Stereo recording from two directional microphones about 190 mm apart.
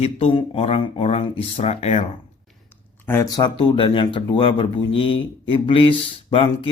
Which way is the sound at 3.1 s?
15° left (ahead or behind).